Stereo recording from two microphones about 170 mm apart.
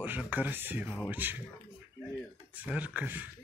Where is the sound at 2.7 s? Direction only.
10° right (ahead or behind).